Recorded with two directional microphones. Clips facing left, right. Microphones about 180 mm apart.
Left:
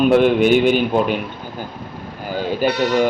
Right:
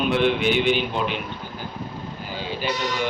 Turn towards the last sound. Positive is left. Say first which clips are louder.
# left 9 dB
turn(degrees=55)  # may be behind; listen again after turning